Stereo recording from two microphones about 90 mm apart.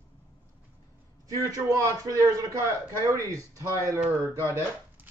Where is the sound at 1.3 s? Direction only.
40° right (ahead or behind).